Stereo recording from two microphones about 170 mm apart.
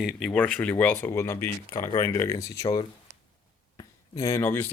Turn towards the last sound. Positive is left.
turn(degrees=15)  # may be behind; listen again after turning